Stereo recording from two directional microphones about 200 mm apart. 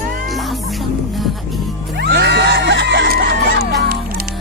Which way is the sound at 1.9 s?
55° right (ahead or behind).